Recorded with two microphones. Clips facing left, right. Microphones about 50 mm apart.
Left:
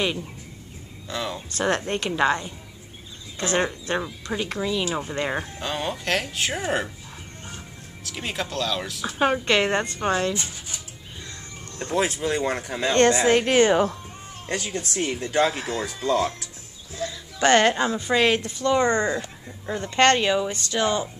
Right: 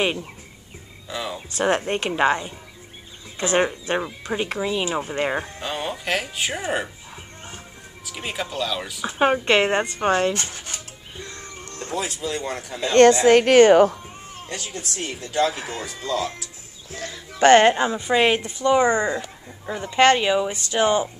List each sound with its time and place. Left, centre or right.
0.0 s speech: right
1.0 s speech: centre
1.6 s speech: centre
5.6 s speech: centre
8.0 s speech: centre
9.0 s speech: centre
10.3 s speech: right
12.0 s speech: left
13.2 s a woman's voice: right
14.5 s speech: left
17.1 s music: right
17.6 s speech: centre